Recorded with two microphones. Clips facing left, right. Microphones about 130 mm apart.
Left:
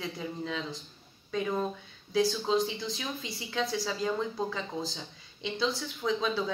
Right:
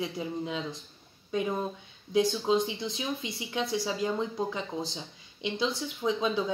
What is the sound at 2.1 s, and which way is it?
A woman's voice, 20° right (ahead or behind).